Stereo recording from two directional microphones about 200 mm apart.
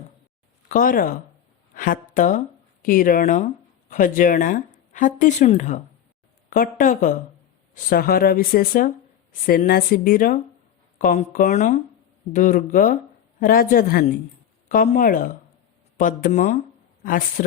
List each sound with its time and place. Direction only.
0.7 s a woman's voice: 45° left (ahead or behind)